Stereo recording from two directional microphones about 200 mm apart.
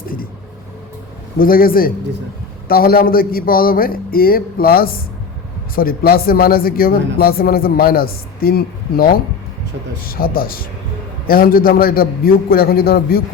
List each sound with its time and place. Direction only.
1.4 s speech: 45° left (ahead or behind)